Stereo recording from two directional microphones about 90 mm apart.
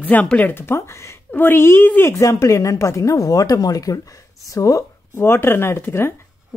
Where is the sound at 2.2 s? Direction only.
35° left (ahead or behind).